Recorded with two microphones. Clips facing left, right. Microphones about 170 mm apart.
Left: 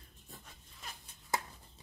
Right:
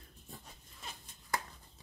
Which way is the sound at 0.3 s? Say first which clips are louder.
Right 2 dB; centre (ahead or behind).